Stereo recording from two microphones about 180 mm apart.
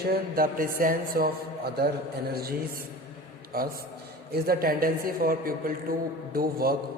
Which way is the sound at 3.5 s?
55° right (ahead or behind).